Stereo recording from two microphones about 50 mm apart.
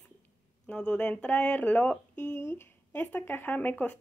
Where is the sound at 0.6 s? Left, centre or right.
Centre.